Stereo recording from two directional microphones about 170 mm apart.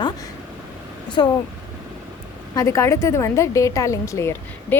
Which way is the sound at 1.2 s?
25° left (ahead or behind).